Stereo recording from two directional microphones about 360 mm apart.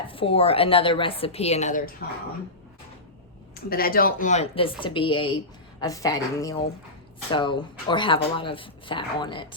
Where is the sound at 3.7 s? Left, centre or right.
Left.